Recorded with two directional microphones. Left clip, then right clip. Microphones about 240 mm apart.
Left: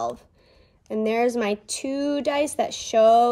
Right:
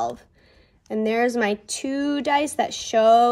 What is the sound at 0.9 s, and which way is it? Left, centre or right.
A woman's voice, right.